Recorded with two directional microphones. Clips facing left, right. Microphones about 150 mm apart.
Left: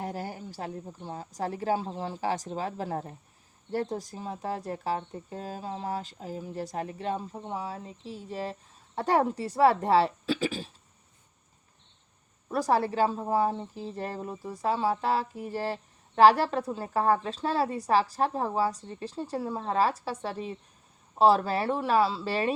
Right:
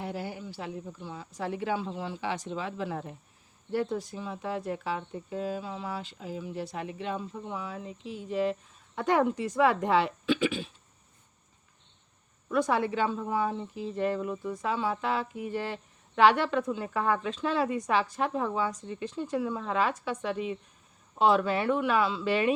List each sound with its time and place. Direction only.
0.0 s a sound: 40° left (ahead or behind)
0.9 s speech: 45° left (ahead or behind)
12.5 s speech: 35° left (ahead or behind)